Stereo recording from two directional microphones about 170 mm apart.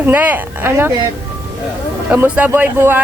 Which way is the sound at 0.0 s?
10° right (ahead or behind).